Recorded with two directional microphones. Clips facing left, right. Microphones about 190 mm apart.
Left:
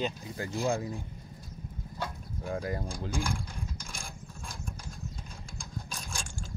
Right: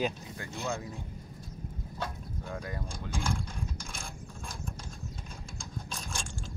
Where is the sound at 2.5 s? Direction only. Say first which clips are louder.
Left 6 dB; 35° left (ahead or behind).